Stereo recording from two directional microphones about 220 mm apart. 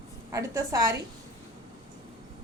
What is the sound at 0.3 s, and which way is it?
Speech, 15° right (ahead or behind).